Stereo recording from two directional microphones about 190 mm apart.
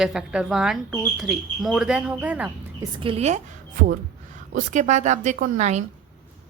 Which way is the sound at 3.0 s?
30° right (ahead or behind).